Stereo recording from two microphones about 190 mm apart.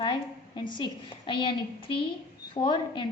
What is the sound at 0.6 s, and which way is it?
A woman's voice, 25° left (ahead or behind).